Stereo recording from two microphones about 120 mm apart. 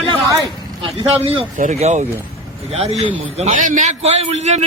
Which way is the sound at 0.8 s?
55° right (ahead or behind).